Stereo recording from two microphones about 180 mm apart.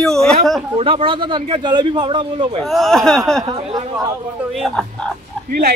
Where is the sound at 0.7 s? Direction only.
30° right (ahead or behind).